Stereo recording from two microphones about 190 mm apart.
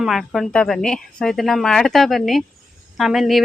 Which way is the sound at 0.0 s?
Centre (ahead or behind).